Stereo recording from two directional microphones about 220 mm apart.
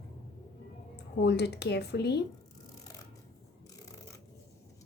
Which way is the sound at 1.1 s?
50° left (ahead or behind).